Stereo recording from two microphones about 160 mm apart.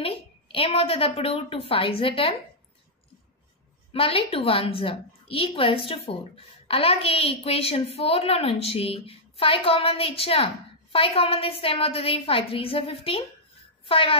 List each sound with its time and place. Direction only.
0.0 s a woman's voice: 35° left (ahead or behind)
3.9 s a woman's voice: 35° left (ahead or behind)